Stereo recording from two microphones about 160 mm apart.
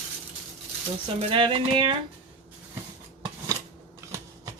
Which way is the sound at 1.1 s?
35° right (ahead or behind).